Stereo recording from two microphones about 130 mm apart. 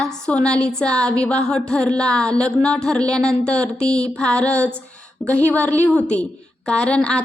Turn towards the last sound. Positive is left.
turn(degrees=10)  # may be behind; listen again after turning